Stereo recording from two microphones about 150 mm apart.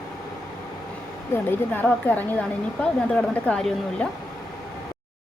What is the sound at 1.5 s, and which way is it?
Speech, 10° left (ahead or behind).